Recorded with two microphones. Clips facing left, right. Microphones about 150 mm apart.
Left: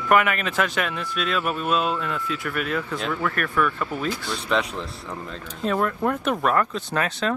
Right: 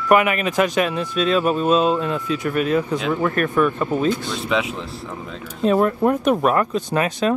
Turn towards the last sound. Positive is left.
turn(degrees=-15)  # may be behind; listen again after turning